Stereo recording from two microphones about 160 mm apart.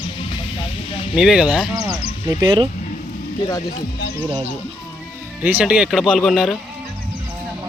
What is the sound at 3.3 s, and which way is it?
Speech, 20° left (ahead or behind).